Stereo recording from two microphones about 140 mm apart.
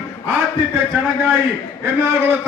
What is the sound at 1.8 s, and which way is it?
Speech, 15° right (ahead or behind).